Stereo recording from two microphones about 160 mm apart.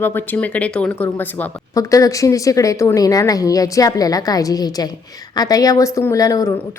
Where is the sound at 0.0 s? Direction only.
15° left (ahead or behind).